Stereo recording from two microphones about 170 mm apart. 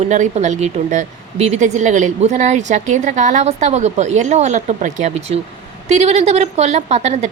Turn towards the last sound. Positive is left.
turn(degrees=-40)  # may be behind; listen again after turning